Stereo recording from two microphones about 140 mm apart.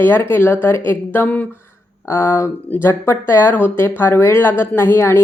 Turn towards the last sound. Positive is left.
turn(degrees=20)  # may be behind; listen again after turning